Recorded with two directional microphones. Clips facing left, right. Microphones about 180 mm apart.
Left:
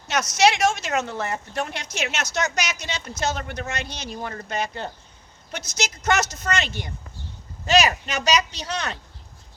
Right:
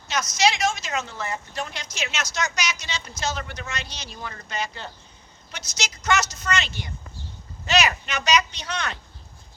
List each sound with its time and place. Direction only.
0.1 s speech: 65° left (ahead or behind); by 9.0 s 35° left (ahead or behind)